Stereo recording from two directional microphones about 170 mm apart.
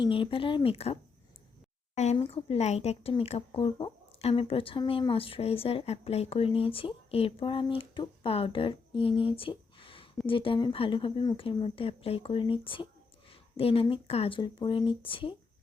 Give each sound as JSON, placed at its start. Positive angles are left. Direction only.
{"t": 0.0, "sound": "a woman's voice", "side_deg": 30}
{"t": 2.1, "sound": "a woman's voice", "side_deg": 35}